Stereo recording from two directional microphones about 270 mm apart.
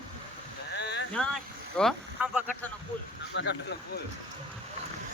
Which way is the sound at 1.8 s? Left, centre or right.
Centre.